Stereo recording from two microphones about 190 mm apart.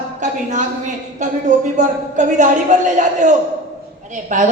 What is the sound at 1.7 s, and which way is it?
A man's voice, 40° right (ahead or behind).